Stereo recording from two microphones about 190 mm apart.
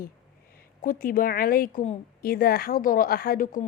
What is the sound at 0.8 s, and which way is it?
Speech, 45° left (ahead or behind).